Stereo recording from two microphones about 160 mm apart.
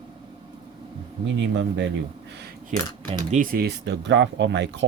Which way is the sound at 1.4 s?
90° right.